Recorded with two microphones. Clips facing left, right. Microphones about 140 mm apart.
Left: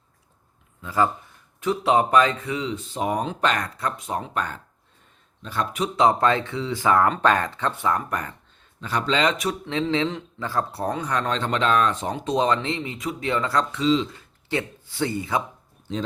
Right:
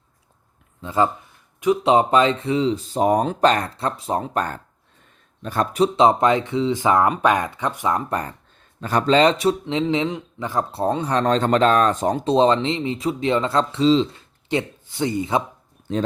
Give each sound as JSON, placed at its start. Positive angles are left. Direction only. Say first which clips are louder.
{"t": 0.8, "sound": "a man's voice", "louder": "right 2 dB", "side_deg": -25}
{"t": 5.8, "sound": "a man's voice", "louder": "right 4 dB", "side_deg": -25}
{"t": 8.8, "sound": "a man's voice", "louder": "right 6 dB", "side_deg": -45}